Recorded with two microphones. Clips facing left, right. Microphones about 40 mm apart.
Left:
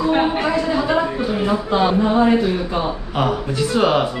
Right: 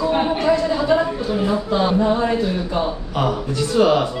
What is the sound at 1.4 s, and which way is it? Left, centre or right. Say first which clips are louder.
Speech: left 2 dB; left.